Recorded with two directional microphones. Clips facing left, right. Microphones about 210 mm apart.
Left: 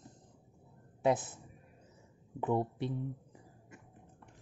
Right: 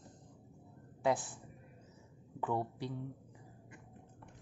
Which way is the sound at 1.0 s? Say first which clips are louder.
Left 3 dB; 20° left (ahead or behind).